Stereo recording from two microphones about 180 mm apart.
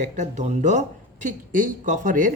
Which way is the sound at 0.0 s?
40° right (ahead or behind).